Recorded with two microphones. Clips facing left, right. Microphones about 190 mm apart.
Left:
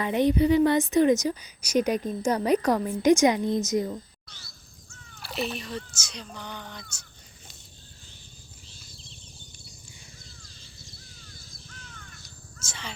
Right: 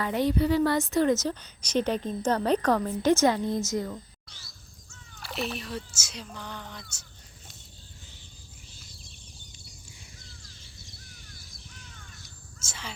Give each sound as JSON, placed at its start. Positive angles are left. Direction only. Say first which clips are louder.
{"t": 0.0, "sound": "a woman's voice", "louder": "left 3 dB", "side_deg": 20}
{"t": 4.3, "sound": "crow", "louder": "left 2 dB", "side_deg": 55}
{"t": 5.2, "sound": "speech", "louder": "left 2 dB", "side_deg": 0}
{"t": 11.1, "sound": "crow", "louder": "left 1 dB", "side_deg": -20}
{"t": 12.6, "sound": "speech", "louder": "left 1 dB", "side_deg": -5}